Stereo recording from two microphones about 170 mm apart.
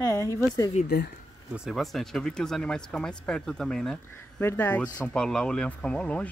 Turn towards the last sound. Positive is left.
turn(degrees=5)  # may be behind; listen again after turning